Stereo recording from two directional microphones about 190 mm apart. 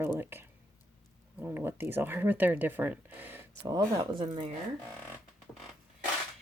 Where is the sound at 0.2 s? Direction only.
10° right (ahead or behind).